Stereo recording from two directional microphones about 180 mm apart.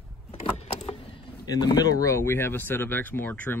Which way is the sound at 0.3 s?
35° left (ahead or behind).